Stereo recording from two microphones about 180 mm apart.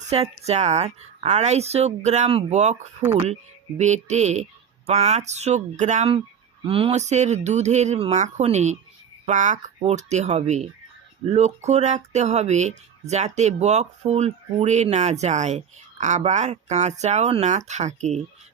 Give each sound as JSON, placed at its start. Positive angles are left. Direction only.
{"t": 0.1, "sound": "speech", "side_deg": -35}